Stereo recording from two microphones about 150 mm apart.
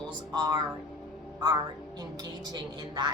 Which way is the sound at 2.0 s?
30° right (ahead or behind).